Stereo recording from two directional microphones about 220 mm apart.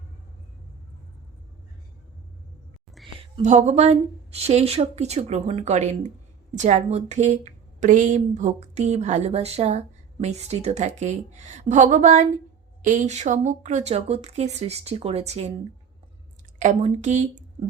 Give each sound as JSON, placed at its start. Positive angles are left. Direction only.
{"t": 3.0, "sound": "a sound", "side_deg": 0}
{"t": 3.3, "sound": "a woman's voice", "side_deg": -30}
{"t": 16.6, "sound": "a woman's voice", "side_deg": -35}